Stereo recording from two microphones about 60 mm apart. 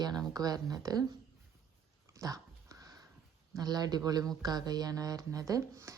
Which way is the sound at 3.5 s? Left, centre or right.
Right.